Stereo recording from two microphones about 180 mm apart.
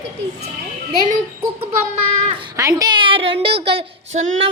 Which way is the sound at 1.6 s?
40° right (ahead or behind).